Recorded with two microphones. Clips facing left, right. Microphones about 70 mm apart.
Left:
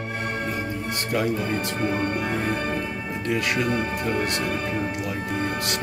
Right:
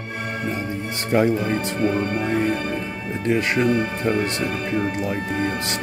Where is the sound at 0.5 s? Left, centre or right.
Right.